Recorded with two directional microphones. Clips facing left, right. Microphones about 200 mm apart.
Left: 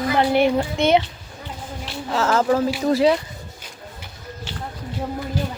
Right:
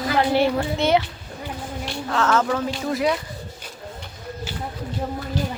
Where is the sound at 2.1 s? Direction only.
30° left (ahead or behind).